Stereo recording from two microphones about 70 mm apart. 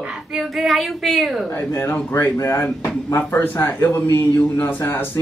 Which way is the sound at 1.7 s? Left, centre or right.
Left.